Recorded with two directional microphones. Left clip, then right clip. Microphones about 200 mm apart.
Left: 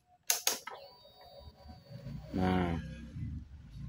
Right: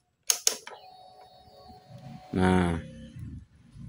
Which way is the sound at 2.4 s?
60° right (ahead or behind).